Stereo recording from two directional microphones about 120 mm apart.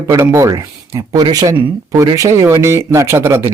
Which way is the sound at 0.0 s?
25° right (ahead or behind).